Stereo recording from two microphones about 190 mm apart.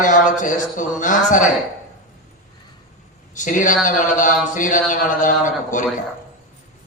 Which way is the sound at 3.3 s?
40° left (ahead or behind).